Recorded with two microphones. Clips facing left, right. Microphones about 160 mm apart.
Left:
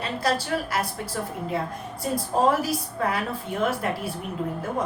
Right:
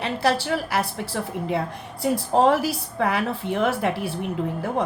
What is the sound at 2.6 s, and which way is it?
A woman's voice, 70° right (ahead or behind).